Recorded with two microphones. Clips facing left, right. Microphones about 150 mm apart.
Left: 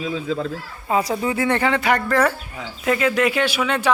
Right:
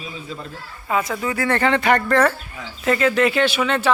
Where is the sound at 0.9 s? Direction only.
30° left (ahead or behind).